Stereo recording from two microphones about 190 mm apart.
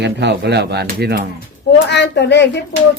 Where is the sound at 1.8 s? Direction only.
65° left (ahead or behind).